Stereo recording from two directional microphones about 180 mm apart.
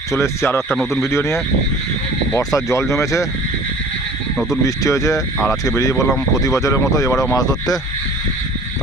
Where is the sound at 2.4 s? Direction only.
20° left (ahead or behind).